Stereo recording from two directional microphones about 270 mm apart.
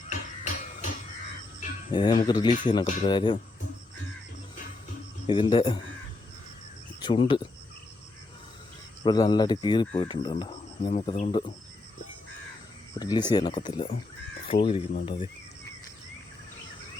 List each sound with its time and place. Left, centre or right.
0.1 s a sound: left
1.9 s speech: centre
5.2 s speech: centre
7.0 s speech: centre
9.0 s speech: centre
13.0 s speech: centre